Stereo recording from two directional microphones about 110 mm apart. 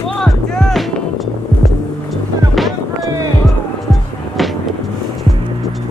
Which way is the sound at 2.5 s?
Centre (ahead or behind).